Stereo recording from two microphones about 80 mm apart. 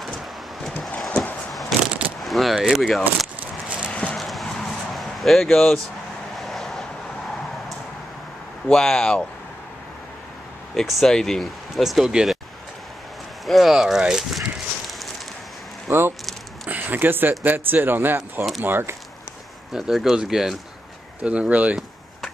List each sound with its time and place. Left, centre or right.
1.7 s a sound: centre
2.2 s speech: centre
3.3 s a sound: centre
3.9 s clip-clop: centre
4.2 s a sound: centre
6.3 s vehicle: centre
8.6 s speech: centre
10.7 s speech: centre
11.8 s speech: centre
13.5 s speech: centre
15.9 s speech: right
19.7 s speech: centre